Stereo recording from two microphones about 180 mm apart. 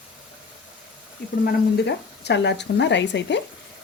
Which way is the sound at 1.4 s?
70° left (ahead or behind).